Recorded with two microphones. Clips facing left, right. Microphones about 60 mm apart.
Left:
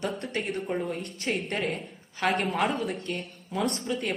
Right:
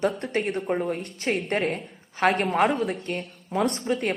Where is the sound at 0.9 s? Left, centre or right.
Right.